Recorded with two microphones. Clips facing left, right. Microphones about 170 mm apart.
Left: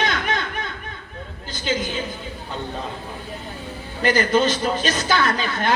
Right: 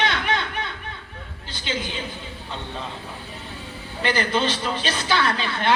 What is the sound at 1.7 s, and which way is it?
Speech, 45° left (ahead or behind).